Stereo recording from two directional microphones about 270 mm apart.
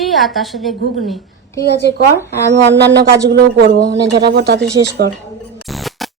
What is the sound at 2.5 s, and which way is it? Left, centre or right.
Speech, right.